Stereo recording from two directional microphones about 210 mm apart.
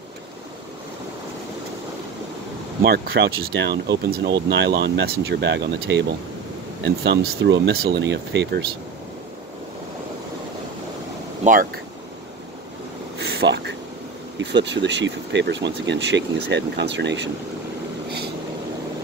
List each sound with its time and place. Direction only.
2.8 s speech: 50° right (ahead or behind)
13.2 s a sound: 50° right (ahead or behind)
14.4 s speech: 55° right (ahead or behind)